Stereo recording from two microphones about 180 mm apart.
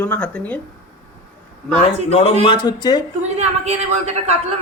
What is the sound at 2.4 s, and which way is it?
Speech, 25° left (ahead or behind).